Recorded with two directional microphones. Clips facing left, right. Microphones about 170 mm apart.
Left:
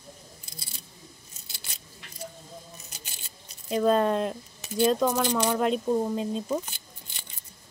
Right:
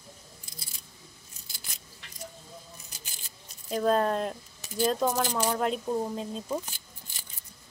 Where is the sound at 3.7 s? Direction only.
Centre (ahead or behind).